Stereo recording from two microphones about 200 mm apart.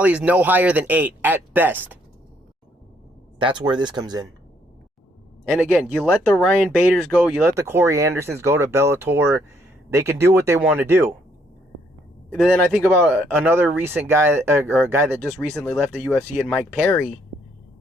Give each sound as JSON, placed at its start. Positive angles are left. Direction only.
{"t": 0.0, "sound": "speech", "side_deg": -5}
{"t": 3.3, "sound": "speech", "side_deg": -25}
{"t": 5.5, "sound": "speech", "side_deg": -10}
{"t": 5.9, "sound": "speech", "side_deg": 5}
{"t": 12.3, "sound": "speech", "side_deg": 5}
{"t": 13.1, "sound": "speech", "side_deg": -10}
{"t": 15.2, "sound": "speech", "side_deg": 5}
{"t": 16.0, "sound": "speech", "side_deg": -10}